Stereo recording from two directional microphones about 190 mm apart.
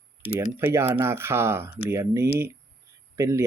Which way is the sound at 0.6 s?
10° right (ahead or behind).